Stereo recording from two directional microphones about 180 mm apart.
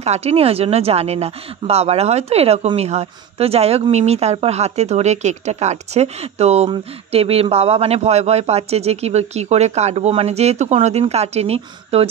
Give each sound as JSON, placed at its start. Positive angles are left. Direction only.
{"t": 0.0, "sound": "speech", "side_deg": -35}